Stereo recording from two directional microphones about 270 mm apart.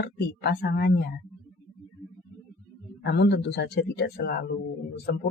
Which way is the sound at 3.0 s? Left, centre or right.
Left.